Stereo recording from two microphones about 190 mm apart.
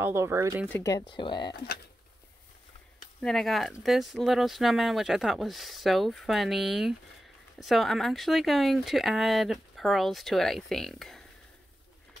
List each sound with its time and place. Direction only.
0.0 s speech: 15° right (ahead or behind)
0.7 s speech: 15° left (ahead or behind)
3.2 s speech: centre (ahead or behind)